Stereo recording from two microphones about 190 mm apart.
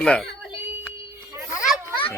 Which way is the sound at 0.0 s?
5° left (ahead or behind).